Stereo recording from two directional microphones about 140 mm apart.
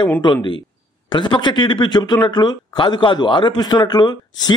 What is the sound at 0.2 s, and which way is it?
Speech, 35° left (ahead or behind).